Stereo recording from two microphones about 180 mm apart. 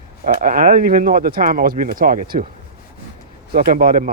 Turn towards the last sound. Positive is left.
turn(degrees=-55)  # may be behind; listen again after turning